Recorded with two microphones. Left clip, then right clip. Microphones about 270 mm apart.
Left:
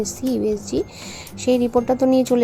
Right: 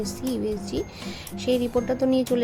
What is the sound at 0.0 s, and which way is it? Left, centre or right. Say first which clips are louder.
A woman's voice: left 6 dB; centre.